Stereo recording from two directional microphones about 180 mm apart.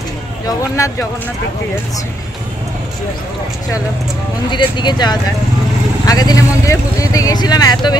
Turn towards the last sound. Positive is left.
turn(degrees=25)  # may be behind; listen again after turning